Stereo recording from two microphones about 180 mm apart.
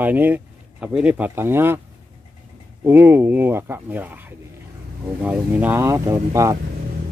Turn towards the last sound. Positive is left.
turn(degrees=-20)  # may be behind; listen again after turning